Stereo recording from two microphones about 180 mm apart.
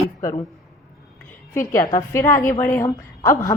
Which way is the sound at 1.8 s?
20° left (ahead or behind).